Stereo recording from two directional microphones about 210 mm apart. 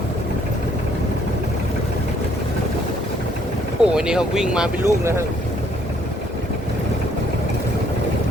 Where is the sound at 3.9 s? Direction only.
5° right (ahead or behind).